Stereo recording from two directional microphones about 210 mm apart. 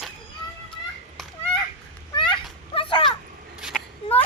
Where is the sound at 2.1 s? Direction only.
25° left (ahead or behind).